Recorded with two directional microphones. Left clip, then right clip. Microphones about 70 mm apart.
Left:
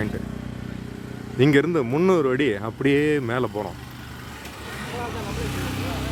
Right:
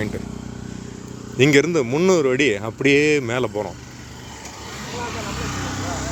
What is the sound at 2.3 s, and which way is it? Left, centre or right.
Speech, centre.